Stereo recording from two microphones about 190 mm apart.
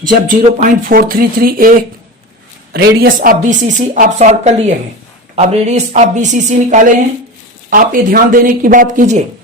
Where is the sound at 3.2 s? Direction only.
40° right (ahead or behind).